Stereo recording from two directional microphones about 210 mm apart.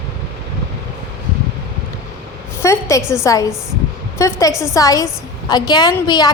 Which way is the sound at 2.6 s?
15° left (ahead or behind).